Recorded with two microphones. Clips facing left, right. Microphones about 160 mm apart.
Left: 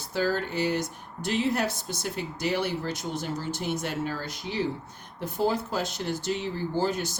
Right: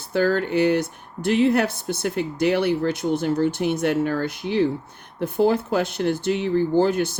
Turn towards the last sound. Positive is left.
turn(degrees=-60)  # may be behind; listen again after turning